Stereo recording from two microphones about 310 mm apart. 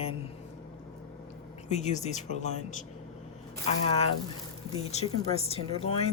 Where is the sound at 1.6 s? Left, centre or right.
Left.